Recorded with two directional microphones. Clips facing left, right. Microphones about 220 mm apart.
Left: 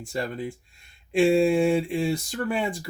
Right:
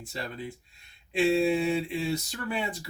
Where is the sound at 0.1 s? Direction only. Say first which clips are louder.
Left 7 dB; 50° left (ahead or behind).